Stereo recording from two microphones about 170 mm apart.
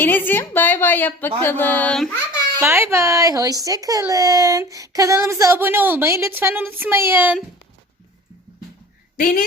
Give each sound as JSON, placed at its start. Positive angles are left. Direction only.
{"t": 0.0, "sound": "a woman's voice", "side_deg": 10}
{"t": 2.6, "sound": "a child's voice", "side_deg": -15}
{"t": 9.1, "sound": "a woman's voice", "side_deg": 55}